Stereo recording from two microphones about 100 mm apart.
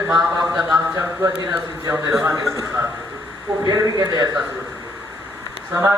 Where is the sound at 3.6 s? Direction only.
35° right (ahead or behind).